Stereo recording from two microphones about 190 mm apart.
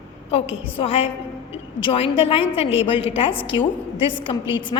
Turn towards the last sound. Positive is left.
turn(degrees=25)  # may be behind; listen again after turning